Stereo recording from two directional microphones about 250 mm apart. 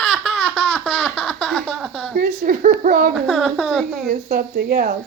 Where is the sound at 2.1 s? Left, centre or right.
Right.